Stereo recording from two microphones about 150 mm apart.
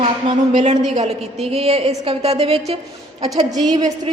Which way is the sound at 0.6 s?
50° right (ahead or behind).